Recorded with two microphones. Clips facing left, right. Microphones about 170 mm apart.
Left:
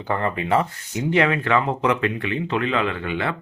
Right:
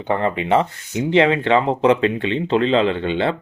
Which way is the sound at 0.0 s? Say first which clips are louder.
Right 4 dB; 20° right (ahead or behind).